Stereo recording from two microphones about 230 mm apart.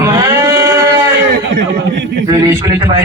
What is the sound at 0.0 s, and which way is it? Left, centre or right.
Sheep, centre.